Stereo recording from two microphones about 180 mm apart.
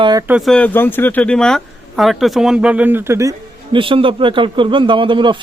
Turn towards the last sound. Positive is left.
turn(degrees=-25)  # may be behind; listen again after turning